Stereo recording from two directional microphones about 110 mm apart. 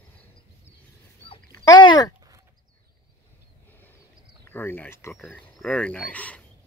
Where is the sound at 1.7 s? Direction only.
40° left (ahead or behind).